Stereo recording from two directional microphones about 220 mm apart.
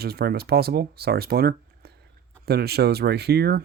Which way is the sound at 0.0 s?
45° right (ahead or behind).